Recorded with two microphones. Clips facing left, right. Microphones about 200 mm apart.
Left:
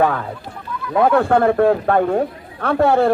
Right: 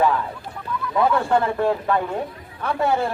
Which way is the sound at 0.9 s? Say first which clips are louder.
Left 5 dB; 55° left (ahead or behind).